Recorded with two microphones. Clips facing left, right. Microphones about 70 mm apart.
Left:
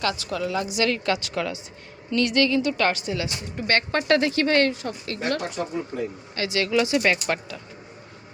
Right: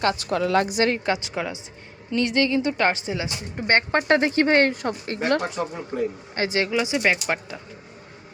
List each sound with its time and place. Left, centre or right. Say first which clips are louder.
0.0 s a woman's voice: right 4 dB; right
0.8 s a woman's voice: right 1 dB; right
4.7 s a woman's voice: right 4 dB; right
5.0 s speech: right 3 dB; right
6.7 s speech: left 1 dB; centre